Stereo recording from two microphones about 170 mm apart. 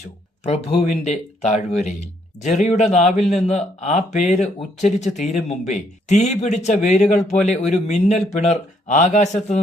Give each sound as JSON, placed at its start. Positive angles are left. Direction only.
{"t": 0.4, "sound": "a man's voice", "side_deg": 35}